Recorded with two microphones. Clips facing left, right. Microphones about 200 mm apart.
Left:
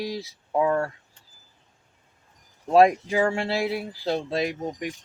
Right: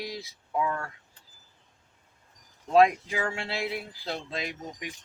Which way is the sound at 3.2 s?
50° left (ahead or behind).